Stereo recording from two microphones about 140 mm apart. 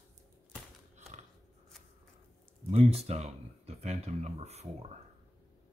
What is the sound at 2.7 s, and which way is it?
Speech, 50° right (ahead or behind).